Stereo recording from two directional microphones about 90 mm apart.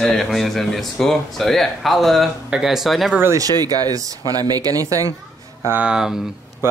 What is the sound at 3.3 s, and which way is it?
Speech, 45° right (ahead or behind).